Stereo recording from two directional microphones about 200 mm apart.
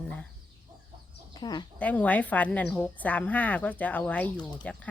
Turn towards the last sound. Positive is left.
turn(degrees=5)  # may be behind; listen again after turning